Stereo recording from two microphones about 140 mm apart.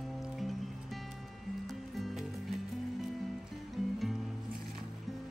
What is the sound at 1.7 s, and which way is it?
Music, centre (ahead or behind).